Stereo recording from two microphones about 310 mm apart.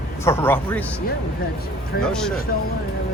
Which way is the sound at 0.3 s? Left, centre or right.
Centre.